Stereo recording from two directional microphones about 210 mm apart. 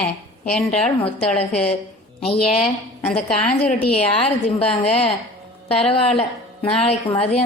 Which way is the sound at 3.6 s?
30° left (ahead or behind).